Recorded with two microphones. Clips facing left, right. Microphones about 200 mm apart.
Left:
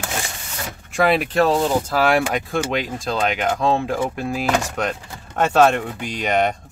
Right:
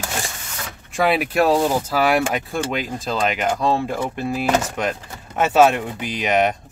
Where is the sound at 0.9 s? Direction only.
5° right (ahead or behind).